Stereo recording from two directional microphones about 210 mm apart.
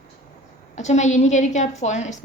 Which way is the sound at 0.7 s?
35° left (ahead or behind).